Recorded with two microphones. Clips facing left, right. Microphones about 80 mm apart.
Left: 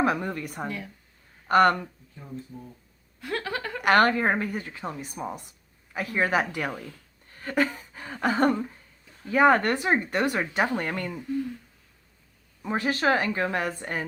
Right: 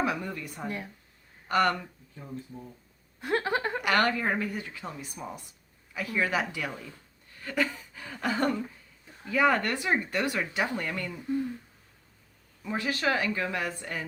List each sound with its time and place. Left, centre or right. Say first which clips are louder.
0.0 s a woman's voice: left 5 dB; left
3.2 s a sound: right 3 dB; right
3.8 s a woman's voice: left 8 dB; left
12.6 s a woman's voice: left 4 dB; left